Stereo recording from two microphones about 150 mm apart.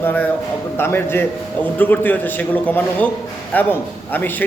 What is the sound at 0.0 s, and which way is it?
A man's voice, 10° left (ahead or behind).